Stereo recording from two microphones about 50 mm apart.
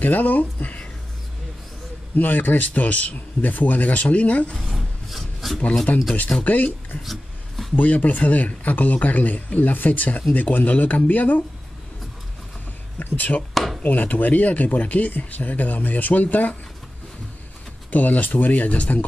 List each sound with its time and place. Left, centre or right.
0.0 s speech: left
2.1 s speech: left
4.6 s rub: centre
5.9 s speech: left
7.0 s a sound: centre
7.7 s speech: left
13.0 s speech: left
17.9 s speech: left